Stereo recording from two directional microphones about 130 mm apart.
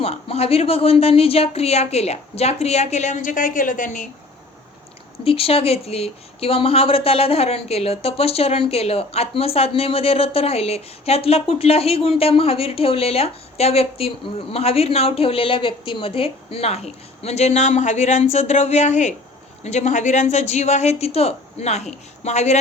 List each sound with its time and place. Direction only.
0.0 s speech: 50° left (ahead or behind); by 4.1 s 75° left (ahead or behind)
5.2 s a woman's voice: 45° left (ahead or behind)